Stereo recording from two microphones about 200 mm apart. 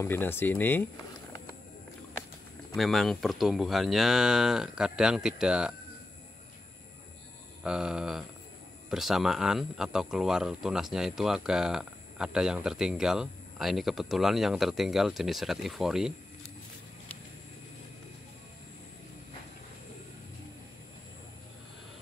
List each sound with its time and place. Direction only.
0.0 s speech: 10° left (ahead or behind)
2.7 s speech: centre (ahead or behind)
7.6 s speech: 5° right (ahead or behind)